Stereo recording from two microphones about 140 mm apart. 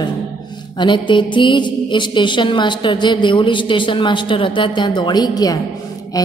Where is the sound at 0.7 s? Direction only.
35° left (ahead or behind).